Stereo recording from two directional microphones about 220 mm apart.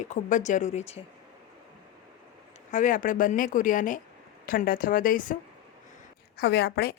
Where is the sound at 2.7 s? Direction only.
35° left (ahead or behind).